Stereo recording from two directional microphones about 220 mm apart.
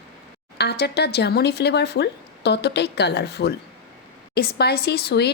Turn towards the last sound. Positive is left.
turn(degrees=50)  # may be behind; listen again after turning